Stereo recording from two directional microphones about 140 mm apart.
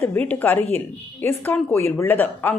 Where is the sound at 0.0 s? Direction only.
15° left (ahead or behind).